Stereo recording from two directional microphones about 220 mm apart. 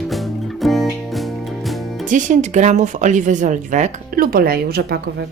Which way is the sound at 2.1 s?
35° right (ahead or behind).